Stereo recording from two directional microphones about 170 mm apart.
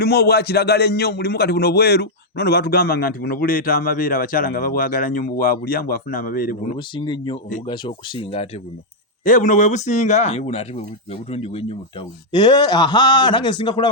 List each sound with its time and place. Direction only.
0.0 s a man's voice: 70° left (ahead or behind)
6.7 s speech: 25° left (ahead or behind)
9.2 s speech: 50° left (ahead or behind); by 13.8 s 25° left (ahead or behind)